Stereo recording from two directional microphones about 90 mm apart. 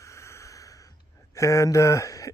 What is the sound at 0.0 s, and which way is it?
Snort, 35° left (ahead or behind).